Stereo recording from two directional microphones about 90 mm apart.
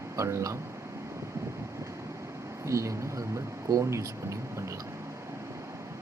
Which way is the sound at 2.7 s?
35° right (ahead or behind).